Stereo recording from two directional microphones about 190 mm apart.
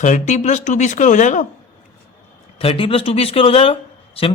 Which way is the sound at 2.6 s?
30° left (ahead or behind).